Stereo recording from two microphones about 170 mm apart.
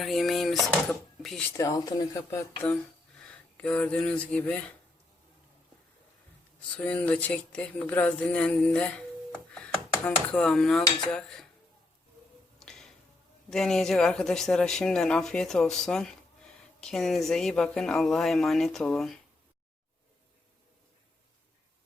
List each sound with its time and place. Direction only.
0.0 s speech: centre (ahead or behind)
1.5 s speech: 20° left (ahead or behind)
6.6 s speech: 10° left (ahead or behind)
12.5 s music: 5° left (ahead or behind)
13.5 s speech: centre (ahead or behind)